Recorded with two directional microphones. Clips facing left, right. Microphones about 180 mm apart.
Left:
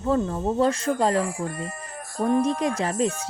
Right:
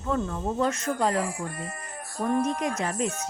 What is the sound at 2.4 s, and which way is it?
Speech, 30° left (ahead or behind).